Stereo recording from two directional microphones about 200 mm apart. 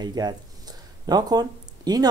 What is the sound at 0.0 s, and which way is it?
Speech, 20° right (ahead or behind).